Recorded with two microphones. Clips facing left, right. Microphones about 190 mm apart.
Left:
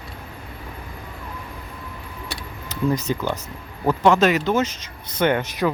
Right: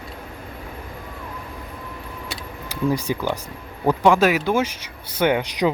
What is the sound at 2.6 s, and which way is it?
Speech, 10° right (ahead or behind).